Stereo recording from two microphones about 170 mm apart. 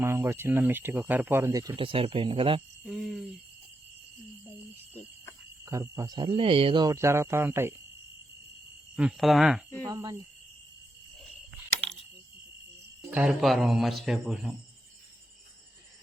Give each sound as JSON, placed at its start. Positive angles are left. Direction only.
{"t": 0.0, "sound": "speech", "side_deg": -15}
{"t": 2.8, "sound": "speech", "side_deg": 0}
{"t": 5.6, "sound": "speech", "side_deg": -15}
{"t": 9.0, "sound": "speech", "side_deg": -5}
{"t": 9.8, "sound": "speech", "side_deg": -20}
{"t": 13.1, "sound": "speech", "side_deg": -5}